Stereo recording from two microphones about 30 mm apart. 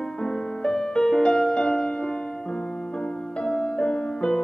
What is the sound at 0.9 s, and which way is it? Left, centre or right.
Music, left.